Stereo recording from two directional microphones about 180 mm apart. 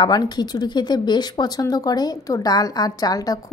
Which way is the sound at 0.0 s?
25° left (ahead or behind).